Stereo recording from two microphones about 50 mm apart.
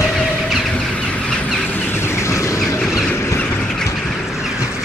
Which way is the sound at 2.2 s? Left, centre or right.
Left.